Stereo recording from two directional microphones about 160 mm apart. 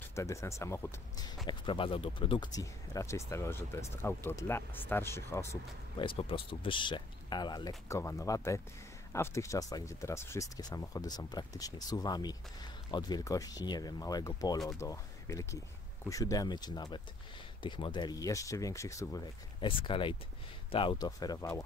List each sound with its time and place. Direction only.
0.1 s speech: 20° left (ahead or behind)
1.5 s speech: 30° left (ahead or behind); by 5.6 s 15° left (ahead or behind)
5.9 s speech: 35° left (ahead or behind)
19.8 s speech: 30° left (ahead or behind)